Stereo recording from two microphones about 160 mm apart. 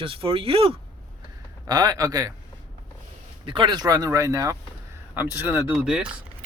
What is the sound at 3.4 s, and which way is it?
Speech, 30° right (ahead or behind).